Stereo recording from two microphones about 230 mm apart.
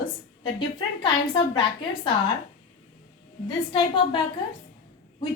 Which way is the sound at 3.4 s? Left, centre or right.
Left.